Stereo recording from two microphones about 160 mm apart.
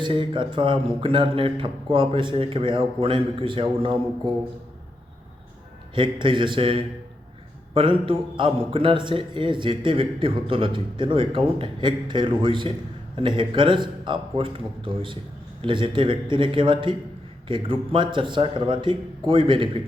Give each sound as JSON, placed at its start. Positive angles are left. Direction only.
{"t": 0.0, "sound": "a man's voice", "side_deg": -30}
{"t": 5.9, "sound": "a man's voice", "side_deg": -30}